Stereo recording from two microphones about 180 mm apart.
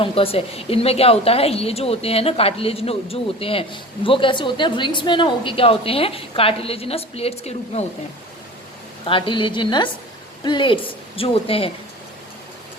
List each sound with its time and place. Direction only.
0.0 s a woman's voice: 30° left (ahead or behind)
9.0 s a woman's voice: 30° left (ahead or behind)